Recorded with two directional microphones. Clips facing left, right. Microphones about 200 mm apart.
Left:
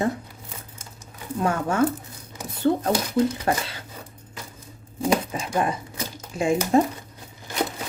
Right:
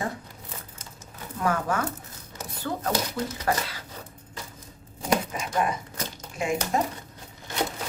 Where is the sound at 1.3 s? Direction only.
25° left (ahead or behind).